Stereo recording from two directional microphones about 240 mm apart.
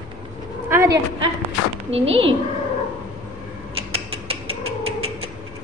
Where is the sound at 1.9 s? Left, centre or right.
Right.